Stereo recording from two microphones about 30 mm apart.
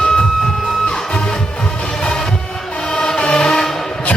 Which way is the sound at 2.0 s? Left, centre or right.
Left.